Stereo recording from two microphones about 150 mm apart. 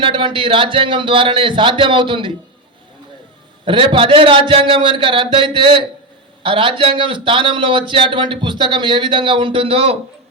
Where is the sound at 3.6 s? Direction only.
35° right (ahead or behind).